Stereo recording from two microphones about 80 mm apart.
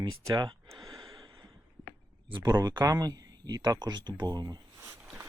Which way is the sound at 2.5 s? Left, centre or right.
Right.